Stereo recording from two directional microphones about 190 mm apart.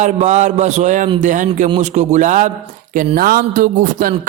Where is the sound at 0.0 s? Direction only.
40° right (ahead or behind).